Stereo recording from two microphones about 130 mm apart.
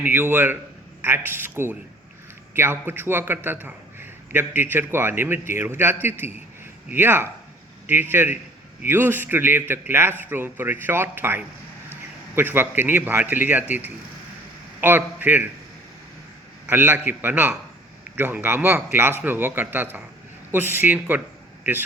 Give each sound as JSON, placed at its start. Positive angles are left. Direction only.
{"t": 0.0, "sound": "a man's voice", "side_deg": -15}
{"t": 16.6, "sound": "a man's voice", "side_deg": -15}